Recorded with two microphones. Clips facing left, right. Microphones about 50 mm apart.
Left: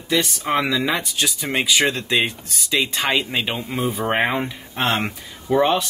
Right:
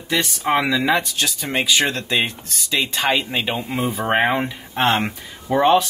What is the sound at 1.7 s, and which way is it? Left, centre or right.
Speech, centre.